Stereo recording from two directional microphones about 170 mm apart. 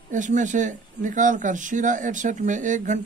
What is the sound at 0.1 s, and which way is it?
Speech, 45° right (ahead or behind).